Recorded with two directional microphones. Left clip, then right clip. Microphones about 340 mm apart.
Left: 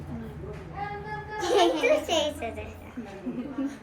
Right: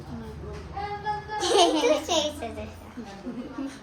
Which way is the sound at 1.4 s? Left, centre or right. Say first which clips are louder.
Right 1 dB; centre.